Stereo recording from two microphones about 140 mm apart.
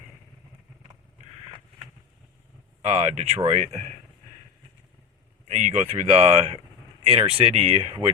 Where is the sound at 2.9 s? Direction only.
45° right (ahead or behind).